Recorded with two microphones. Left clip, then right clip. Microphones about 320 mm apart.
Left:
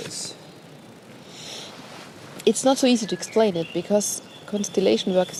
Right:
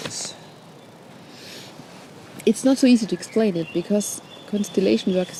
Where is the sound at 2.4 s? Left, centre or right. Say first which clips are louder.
Even; left.